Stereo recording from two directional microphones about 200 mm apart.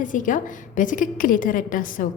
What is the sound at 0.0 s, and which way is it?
A woman's voice, 40° left (ahead or behind).